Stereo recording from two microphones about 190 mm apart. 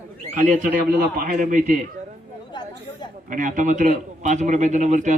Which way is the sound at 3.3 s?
45° right (ahead or behind).